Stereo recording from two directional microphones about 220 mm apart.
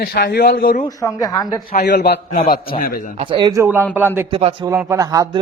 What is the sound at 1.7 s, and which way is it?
Speech, 50° left (ahead or behind).